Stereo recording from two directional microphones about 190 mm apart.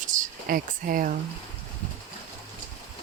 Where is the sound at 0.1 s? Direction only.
45° right (ahead or behind).